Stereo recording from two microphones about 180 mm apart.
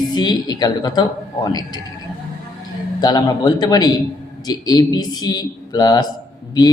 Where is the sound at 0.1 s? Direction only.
25° left (ahead or behind).